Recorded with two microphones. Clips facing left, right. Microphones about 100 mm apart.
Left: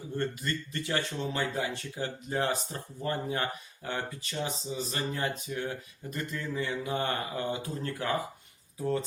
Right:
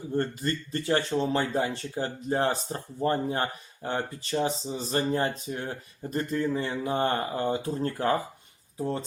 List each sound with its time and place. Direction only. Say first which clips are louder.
0.2 s speech: right 3 dB; 35° right (ahead or behind)